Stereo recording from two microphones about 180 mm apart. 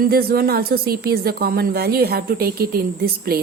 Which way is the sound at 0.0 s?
55° right (ahead or behind).